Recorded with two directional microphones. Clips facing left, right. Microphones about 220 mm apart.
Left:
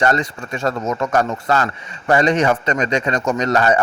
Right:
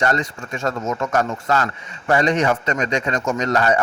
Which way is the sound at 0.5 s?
35° left (ahead or behind).